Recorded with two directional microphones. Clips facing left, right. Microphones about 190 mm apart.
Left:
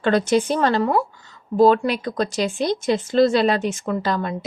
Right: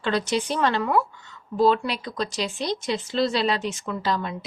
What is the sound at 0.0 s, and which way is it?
Speech, 50° left (ahead or behind).